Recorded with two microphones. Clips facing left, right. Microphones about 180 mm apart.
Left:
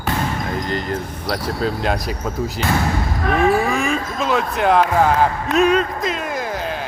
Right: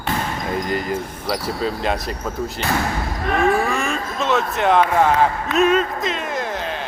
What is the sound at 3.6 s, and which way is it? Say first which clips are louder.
Music: left 2 dB; centre (ahead or behind).